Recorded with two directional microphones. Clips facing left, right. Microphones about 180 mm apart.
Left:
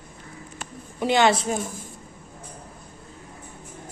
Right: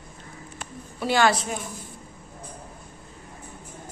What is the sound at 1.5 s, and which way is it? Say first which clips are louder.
Speech: left 5 dB; 45° left (ahead or behind).